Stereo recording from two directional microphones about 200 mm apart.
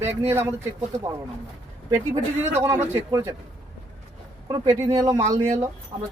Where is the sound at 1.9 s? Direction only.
15° right (ahead or behind).